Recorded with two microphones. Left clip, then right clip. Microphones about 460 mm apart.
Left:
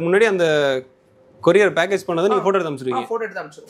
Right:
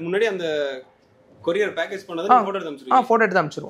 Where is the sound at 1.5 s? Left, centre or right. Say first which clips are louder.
Left 8 dB; left.